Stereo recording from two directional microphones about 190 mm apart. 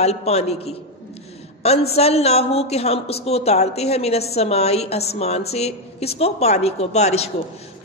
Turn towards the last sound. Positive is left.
turn(degrees=35)  # may be behind; listen again after turning